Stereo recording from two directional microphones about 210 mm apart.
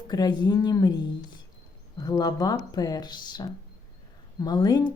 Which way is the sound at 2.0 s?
20° left (ahead or behind).